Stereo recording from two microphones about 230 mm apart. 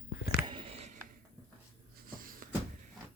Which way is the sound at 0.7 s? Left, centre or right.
Right.